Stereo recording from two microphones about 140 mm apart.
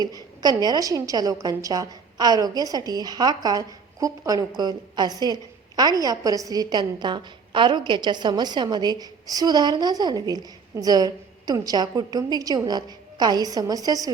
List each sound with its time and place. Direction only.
0.0 s a woman's voice: 30° right (ahead or behind)